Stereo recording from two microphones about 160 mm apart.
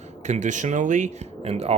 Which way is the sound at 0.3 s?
50° right (ahead or behind).